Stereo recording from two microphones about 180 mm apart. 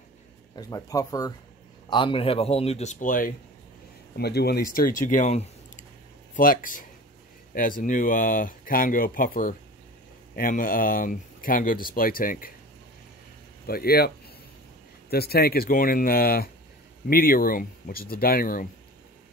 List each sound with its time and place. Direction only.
0.6 s speech: 20° left (ahead or behind); by 3.3 s 50° left (ahead or behind)
4.2 s speech: 65° left (ahead or behind)
13.7 s speech: 55° left (ahead or behind)